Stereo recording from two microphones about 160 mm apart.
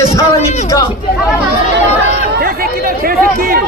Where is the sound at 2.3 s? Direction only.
70° right (ahead or behind).